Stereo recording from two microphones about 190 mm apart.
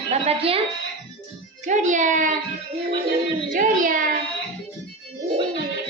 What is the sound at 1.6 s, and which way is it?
Speech, 40° right (ahead or behind).